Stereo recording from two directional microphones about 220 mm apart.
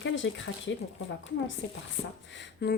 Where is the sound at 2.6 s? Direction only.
50° left (ahead or behind).